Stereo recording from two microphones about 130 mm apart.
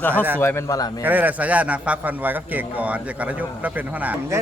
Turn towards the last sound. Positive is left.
turn(degrees=-10)  # may be behind; listen again after turning